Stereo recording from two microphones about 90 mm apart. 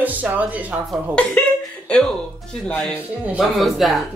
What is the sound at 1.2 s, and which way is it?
Speech, 15° left (ahead or behind).